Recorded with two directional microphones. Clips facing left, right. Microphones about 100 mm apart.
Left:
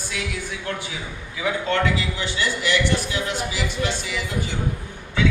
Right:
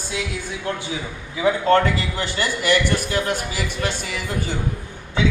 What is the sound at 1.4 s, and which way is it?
A man's voice, 45° right (ahead or behind).